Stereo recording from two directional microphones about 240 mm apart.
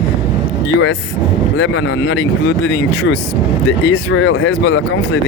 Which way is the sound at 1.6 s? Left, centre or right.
Left.